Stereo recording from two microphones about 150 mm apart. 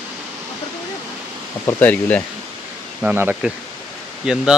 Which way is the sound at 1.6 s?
10° left (ahead or behind).